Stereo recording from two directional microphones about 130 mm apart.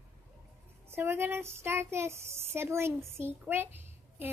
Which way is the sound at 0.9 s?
15° right (ahead or behind).